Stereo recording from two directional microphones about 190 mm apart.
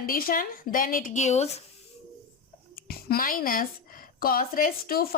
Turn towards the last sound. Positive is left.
turn(degrees=50)  # may be behind; listen again after turning